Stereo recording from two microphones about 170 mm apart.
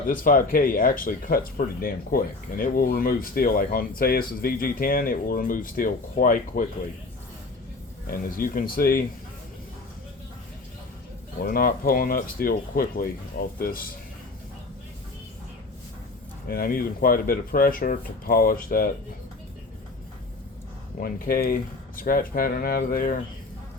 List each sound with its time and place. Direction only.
0.0 s speech: 55° left (ahead or behind)
8.0 s speech: 55° left (ahead or behind)
11.4 s speech: 60° left (ahead or behind)
16.5 s speech: 60° left (ahead or behind)
21.0 s speech: 55° left (ahead or behind)